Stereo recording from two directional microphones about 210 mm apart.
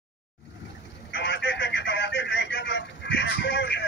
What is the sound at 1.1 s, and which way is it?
Telephone, 55° left (ahead or behind).